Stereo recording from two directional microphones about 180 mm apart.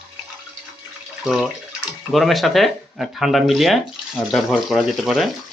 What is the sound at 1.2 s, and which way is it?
Speech, centre (ahead or behind).